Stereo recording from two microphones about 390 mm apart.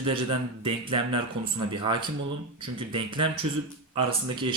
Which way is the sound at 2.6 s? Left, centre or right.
Centre.